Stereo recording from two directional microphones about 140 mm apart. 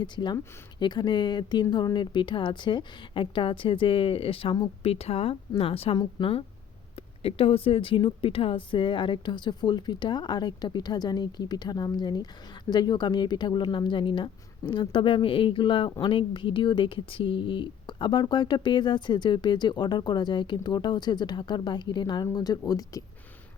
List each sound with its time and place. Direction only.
0.0 s speech: 30° left (ahead or behind)